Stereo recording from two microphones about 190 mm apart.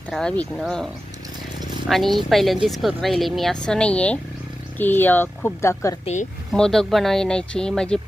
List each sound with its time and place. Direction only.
0.1 s a woman's voice: 5° left (ahead or behind)
1.9 s a woman's voice: centre (ahead or behind)
6.5 s a woman's voice: centre (ahead or behind)